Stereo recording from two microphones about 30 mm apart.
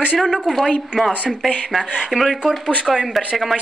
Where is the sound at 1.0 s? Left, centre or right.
Centre.